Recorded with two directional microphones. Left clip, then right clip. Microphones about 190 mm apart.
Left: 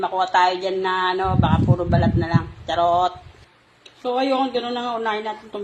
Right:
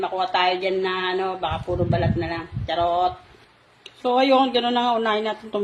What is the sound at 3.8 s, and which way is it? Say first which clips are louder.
Speech: right 3 dB; 30° right (ahead or behind).